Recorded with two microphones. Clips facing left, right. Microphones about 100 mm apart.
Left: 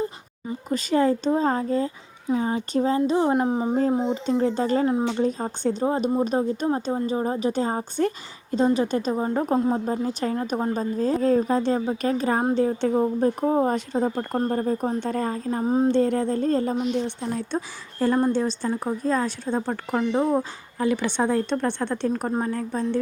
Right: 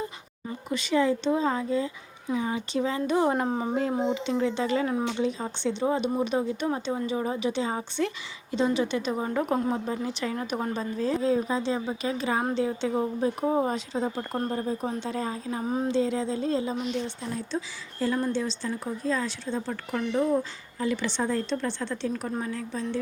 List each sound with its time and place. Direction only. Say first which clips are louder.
0.7 s a woman's voice: left 3 dB; 40° left (ahead or behind); by 3.8 s 15° left (ahead or behind)
4.1 s a woman's voice: left 4 dB; 40° left (ahead or behind)
13.0 s a woman's voice: left 4 dB; 35° left (ahead or behind)
13.7 s a woman's voice: left 5 dB; 50° left (ahead or behind)
15.6 s a woman's voice: left 7 dB; 35° left (ahead or behind)
15.9 s a woman's voice: left 5 dB; 55° left (ahead or behind)